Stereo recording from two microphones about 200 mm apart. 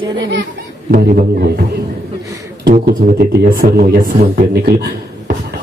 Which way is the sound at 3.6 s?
50° right (ahead or behind).